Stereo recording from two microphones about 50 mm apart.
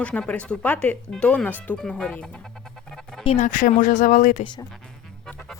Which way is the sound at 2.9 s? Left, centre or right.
Centre.